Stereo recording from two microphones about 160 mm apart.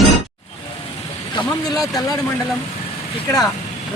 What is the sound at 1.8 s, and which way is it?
Speech, 20° left (ahead or behind).